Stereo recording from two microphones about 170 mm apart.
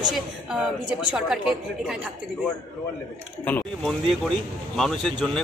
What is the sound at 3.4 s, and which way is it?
A woman's voice, 5° left (ahead or behind).